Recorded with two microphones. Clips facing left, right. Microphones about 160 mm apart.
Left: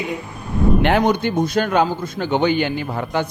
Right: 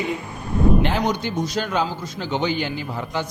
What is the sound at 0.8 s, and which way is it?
A man's voice, 60° left (ahead or behind).